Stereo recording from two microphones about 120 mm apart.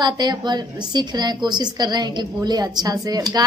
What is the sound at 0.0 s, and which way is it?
A woman's voice, 35° right (ahead or behind).